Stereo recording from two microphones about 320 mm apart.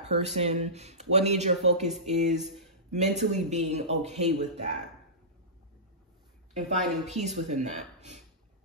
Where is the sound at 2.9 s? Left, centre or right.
Right.